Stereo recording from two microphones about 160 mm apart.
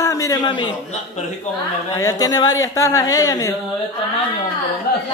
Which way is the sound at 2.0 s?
20° left (ahead or behind).